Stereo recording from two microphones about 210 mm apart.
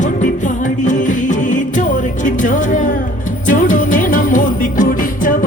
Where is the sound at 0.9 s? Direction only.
35° left (ahead or behind).